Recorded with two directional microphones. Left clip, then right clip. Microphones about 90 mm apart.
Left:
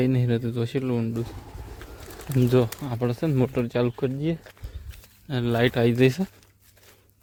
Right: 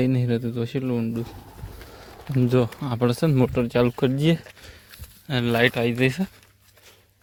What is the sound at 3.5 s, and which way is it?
Speech, 10° right (ahead or behind).